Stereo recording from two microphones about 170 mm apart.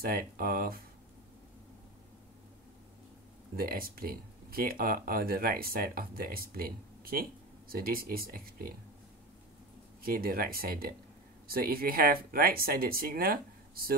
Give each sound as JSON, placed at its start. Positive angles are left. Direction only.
{"t": 0.0, "sound": "speech", "side_deg": -60}
{"t": 3.5, "sound": "speech", "side_deg": -60}
{"t": 10.0, "sound": "speech", "side_deg": -60}